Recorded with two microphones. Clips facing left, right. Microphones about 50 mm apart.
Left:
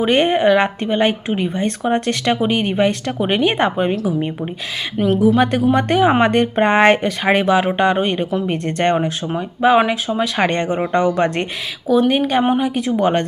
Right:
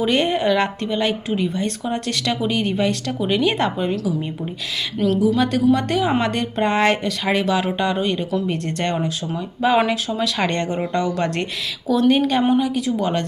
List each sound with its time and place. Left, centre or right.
0.0 s speech: left
9.6 s speech: centre
11.9 s speech: centre
12.4 s speech: left